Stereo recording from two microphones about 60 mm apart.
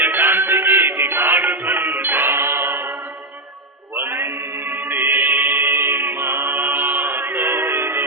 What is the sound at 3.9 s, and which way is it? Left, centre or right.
Music, right.